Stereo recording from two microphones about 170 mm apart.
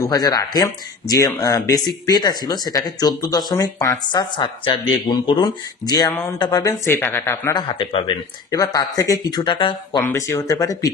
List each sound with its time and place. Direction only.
0.0 s a woman's voice: 20° left (ahead or behind)
7.8 s speech: 30° left (ahead or behind)
8.7 s speech: 20° left (ahead or behind)
10.0 s speech: 15° left (ahead or behind)